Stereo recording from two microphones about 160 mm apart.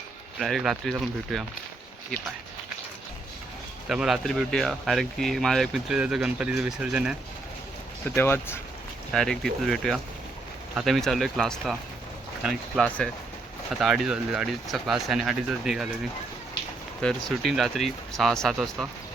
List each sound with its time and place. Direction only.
0.3 s speech: centre (ahead or behind)
3.8 s speech: 5° right (ahead or behind)
8.0 s speech: 15° left (ahead or behind)
9.1 s speech: 5° left (ahead or behind)
17.0 s speech: 5° left (ahead or behind)